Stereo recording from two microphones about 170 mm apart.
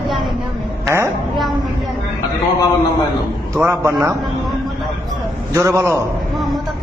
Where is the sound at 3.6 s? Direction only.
15° right (ahead or behind).